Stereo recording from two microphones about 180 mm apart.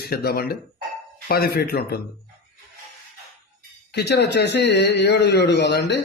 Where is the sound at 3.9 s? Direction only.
70° left (ahead or behind).